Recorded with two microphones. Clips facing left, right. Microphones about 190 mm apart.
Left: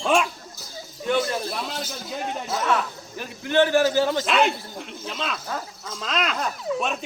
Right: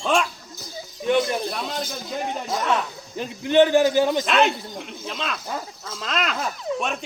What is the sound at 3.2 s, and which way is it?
A man's voice, 20° right (ahead or behind).